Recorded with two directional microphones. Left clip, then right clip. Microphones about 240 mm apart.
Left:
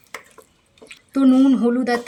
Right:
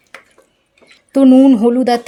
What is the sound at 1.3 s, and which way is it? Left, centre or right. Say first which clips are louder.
Speech: right 7 dB; right.